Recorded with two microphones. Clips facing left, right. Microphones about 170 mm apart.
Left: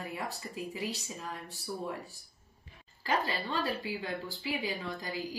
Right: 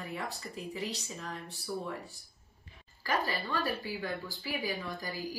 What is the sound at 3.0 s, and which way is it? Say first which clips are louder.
Speech: left 1 dB; 20° left (ahead or behind).